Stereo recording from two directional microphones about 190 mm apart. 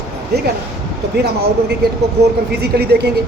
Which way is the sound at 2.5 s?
60° right (ahead or behind).